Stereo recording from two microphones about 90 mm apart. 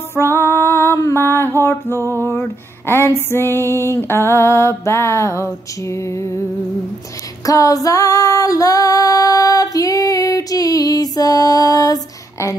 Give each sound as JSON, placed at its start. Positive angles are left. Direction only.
{"t": 0.1, "sound": "female singing", "side_deg": 25}
{"t": 1.6, "sound": "music", "side_deg": 30}
{"t": 2.0, "sound": "music", "side_deg": -35}
{"t": 3.2, "sound": "music", "side_deg": 25}
{"t": 7.4, "sound": "female singing", "side_deg": 40}